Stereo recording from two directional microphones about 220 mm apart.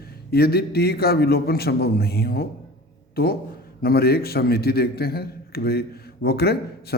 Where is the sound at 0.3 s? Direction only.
45° left (ahead or behind).